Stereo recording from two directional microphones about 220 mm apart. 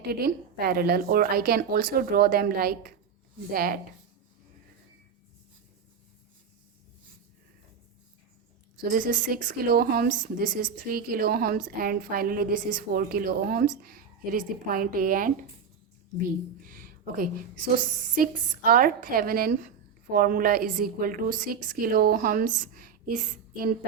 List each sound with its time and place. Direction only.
0.0 s a woman's voice: 45° right (ahead or behind)
8.8 s a woman's voice: 40° right (ahead or behind)
16.6 s a sound: 40° right (ahead or behind)
18.1 s a woman's voice: 40° right (ahead or behind)